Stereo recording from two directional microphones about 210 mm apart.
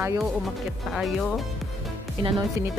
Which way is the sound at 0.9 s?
Centre (ahead or behind).